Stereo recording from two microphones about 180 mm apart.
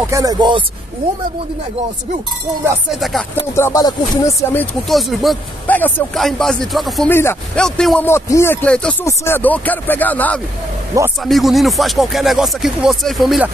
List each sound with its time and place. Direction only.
0.1 s speech: 20° right (ahead or behind)
3.0 s speech: centre (ahead or behind)
3.3 s speech: 15° left (ahead or behind)
4.8 s speech: centre (ahead or behind)
5.8 s speech: 10° left (ahead or behind)
7.1 s speech: 10° left (ahead or behind)
8.1 s speech: 15° left (ahead or behind); by 13.5 s centre (ahead or behind)